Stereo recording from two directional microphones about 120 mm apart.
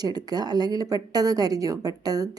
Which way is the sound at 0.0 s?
35° right (ahead or behind).